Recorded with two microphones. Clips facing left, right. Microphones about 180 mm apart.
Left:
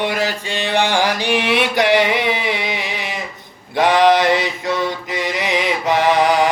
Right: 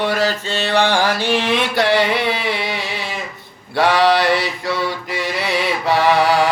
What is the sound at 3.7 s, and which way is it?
Mantra, 20° left (ahead or behind).